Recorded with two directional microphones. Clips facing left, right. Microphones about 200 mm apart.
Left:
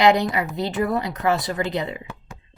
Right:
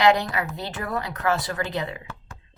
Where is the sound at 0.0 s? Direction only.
15° left (ahead or behind).